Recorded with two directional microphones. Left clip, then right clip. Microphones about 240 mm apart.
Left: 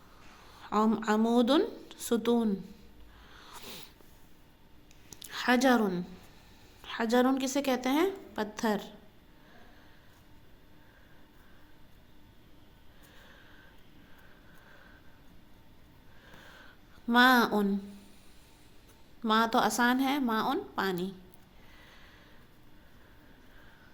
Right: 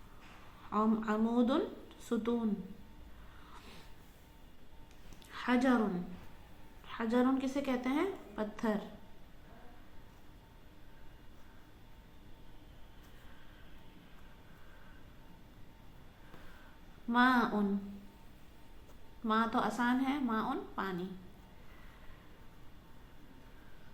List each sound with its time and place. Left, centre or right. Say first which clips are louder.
0.6 s a woman's voice: left 5 dB; left
3.4 s snort: left 9 dB; left
5.1 s a sound: left 6 dB; left
6.8 s a woman's voice: left 6 dB; left
17.1 s a woman's voice: left 6 dB; left
19.2 s a woman's voice: left 6 dB; left